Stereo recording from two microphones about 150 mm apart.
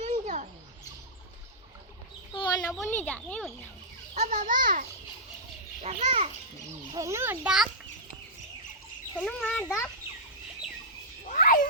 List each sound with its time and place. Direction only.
0.0 s bird: 55° right (ahead or behind)
2.3 s bird: 30° left (ahead or behind)
2.8 s speech: 15° left (ahead or behind)
4.1 s a child's voice: 55° right (ahead or behind)
5.8 s a child's voice: 40° right (ahead or behind)
6.7 s speech: 20° right (ahead or behind)
7.4 s a child's voice: 5° right (ahead or behind)
9.1 s speech: 5° left (ahead or behind)
11.3 s cat: 60° left (ahead or behind)